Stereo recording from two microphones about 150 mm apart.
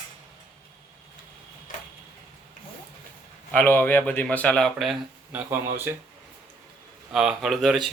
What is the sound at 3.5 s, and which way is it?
Speech, 15° left (ahead or behind).